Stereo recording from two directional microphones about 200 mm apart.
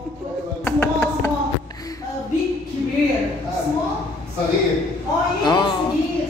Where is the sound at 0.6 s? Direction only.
10° left (ahead or behind).